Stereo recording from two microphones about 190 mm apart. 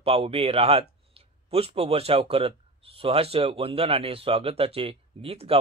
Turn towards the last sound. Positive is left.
turn(degrees=-30)  # may be behind; listen again after turning